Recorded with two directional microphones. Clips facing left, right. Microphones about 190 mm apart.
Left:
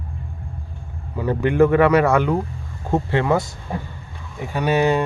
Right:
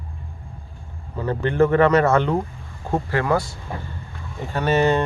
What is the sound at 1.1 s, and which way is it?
A man's voice, 15° left (ahead or behind).